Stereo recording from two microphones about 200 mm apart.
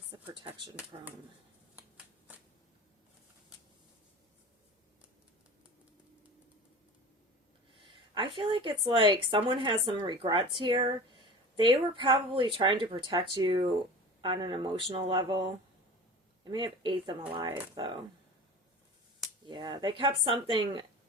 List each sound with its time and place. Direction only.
0.3 s a woman's voice: 25° right (ahead or behind)
8.1 s a woman's voice: 25° right (ahead or behind)
19.5 s a woman's voice: 20° right (ahead or behind)